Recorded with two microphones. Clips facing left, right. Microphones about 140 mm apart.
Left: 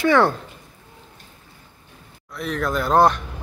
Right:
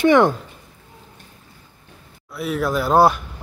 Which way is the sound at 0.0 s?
20° right (ahead or behind).